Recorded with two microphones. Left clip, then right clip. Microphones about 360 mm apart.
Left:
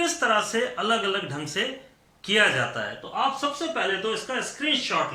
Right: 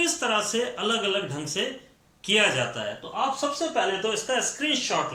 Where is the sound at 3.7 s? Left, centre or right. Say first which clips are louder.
Even; centre.